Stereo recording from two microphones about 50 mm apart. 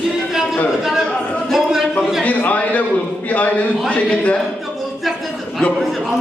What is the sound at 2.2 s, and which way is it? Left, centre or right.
A man's voice, left.